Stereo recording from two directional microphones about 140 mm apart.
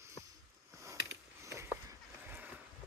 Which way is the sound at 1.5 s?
15° right (ahead or behind).